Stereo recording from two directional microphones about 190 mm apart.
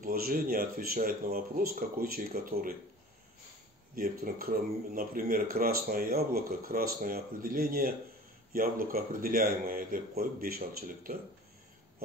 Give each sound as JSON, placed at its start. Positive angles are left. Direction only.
{"t": 0.0, "sound": "speech", "side_deg": -50}
{"t": 3.9, "sound": "speech", "side_deg": -50}